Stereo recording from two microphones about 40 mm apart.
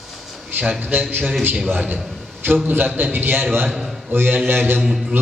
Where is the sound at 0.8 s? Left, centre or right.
Right.